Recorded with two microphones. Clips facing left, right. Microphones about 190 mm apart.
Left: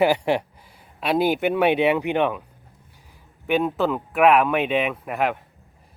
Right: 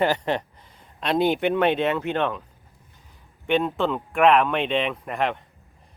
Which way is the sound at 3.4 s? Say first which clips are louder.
Left 1 dB; 5° left (ahead or behind).